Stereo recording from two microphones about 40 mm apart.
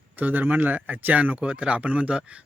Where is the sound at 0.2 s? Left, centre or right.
Right.